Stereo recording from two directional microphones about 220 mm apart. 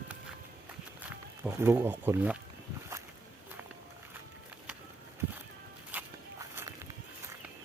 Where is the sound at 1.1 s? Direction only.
10° right (ahead or behind).